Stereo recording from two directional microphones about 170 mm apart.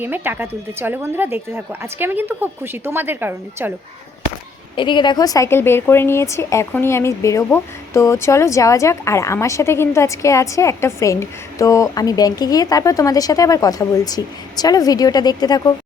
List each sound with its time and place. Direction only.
0.0 s speech: 10° right (ahead or behind)
4.8 s speech: 30° left (ahead or behind)